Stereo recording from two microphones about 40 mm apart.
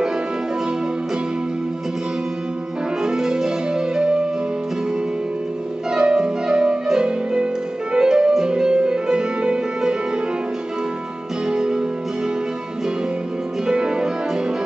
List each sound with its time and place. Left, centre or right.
3.0 s music: centre
5.9 s music: centre
11.4 s music: centre
13.7 s music: centre